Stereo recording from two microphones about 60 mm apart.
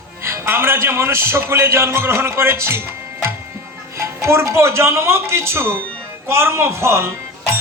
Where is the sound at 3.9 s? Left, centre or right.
Right.